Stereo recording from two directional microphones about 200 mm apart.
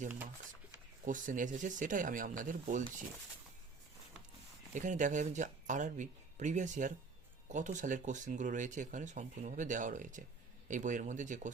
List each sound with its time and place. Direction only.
1.0 s speech: 40° right (ahead or behind)
4.7 s speech: 40° right (ahead or behind)